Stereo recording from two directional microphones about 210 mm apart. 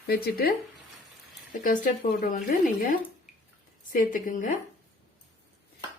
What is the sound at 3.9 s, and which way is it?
Speech, 40° left (ahead or behind).